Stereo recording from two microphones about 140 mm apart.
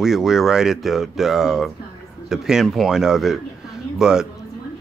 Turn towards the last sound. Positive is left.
turn(degrees=-5)  # may be behind; listen again after turning